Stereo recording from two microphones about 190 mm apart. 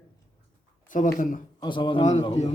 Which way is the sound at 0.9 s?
45° left (ahead or behind).